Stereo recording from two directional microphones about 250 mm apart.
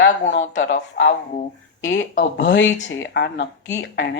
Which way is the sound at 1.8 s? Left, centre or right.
Left.